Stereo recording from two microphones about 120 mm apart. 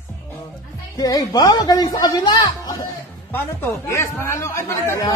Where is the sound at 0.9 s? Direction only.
35° left (ahead or behind).